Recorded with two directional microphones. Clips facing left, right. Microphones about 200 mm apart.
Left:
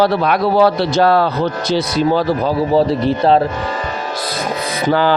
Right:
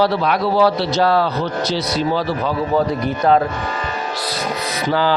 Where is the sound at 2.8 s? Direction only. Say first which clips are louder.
Left 4 dB; 30° left (ahead or behind).